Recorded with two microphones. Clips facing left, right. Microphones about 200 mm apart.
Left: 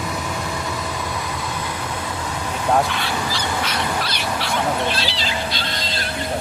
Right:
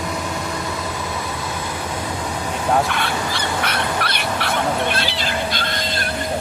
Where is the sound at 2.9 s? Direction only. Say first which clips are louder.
Right 1 dB; 55° right (ahead or behind).